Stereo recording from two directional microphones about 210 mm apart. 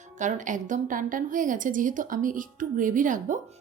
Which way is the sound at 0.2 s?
35° right (ahead or behind).